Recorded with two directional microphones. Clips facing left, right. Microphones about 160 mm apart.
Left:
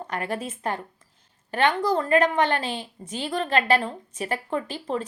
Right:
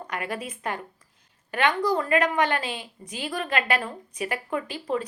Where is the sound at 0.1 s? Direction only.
30° left (ahead or behind).